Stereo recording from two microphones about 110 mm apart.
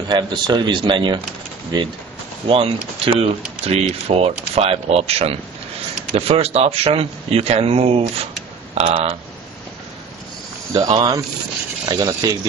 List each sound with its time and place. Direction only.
0.1 s speech: 45° right (ahead or behind)
2.4 s speech: 60° right (ahead or behind)
10.7 s speech: 45° right (ahead or behind)